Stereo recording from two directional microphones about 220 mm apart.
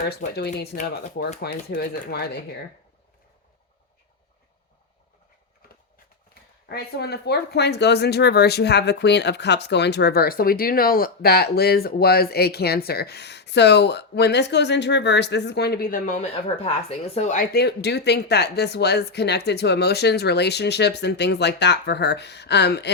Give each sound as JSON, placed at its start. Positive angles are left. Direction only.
{"t": 0.3, "sound": "speech", "side_deg": 45}
{"t": 6.7, "sound": "speech", "side_deg": 45}